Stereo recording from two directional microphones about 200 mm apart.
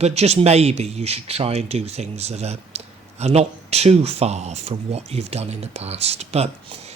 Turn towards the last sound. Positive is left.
turn(degrees=-30)  # may be behind; listen again after turning